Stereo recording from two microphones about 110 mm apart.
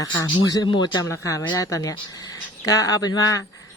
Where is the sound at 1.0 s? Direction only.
25° left (ahead or behind).